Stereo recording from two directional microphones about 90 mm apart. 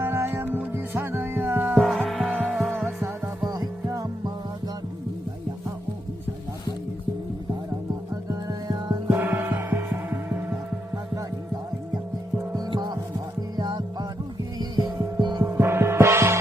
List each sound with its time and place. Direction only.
0.0 s music: 25° right (ahead or behind)
1.7 s insect: centre (ahead or behind)
2.0 s vehicle: centre (ahead or behind)
2.3 s music: 20° right (ahead or behind)
3.5 s music: 45° right (ahead or behind)
8.1 s music: 45° right (ahead or behind)
9.0 s music: 25° right (ahead or behind)
12.5 s music: 50° right (ahead or behind)
15.2 s gong: 55° right (ahead or behind)
15.4 s gong: 25° right (ahead or behind)